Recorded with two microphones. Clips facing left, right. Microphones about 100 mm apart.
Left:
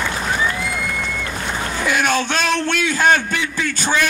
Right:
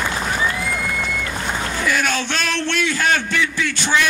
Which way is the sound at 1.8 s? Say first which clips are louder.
Left 3 dB; 50° left (ahead or behind).